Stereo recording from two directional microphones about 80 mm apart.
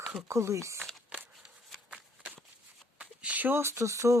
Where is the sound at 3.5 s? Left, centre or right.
Right.